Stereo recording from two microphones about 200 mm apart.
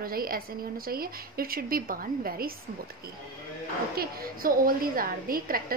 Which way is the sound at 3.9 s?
50° right (ahead or behind).